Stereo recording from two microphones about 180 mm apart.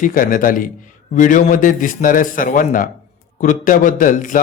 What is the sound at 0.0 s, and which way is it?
Speech, 50° left (ahead or behind).